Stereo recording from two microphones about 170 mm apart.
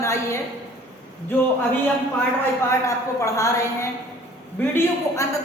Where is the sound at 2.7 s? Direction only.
20° left (ahead or behind).